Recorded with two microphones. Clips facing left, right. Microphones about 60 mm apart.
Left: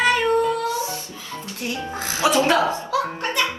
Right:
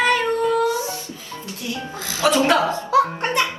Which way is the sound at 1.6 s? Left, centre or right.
Left.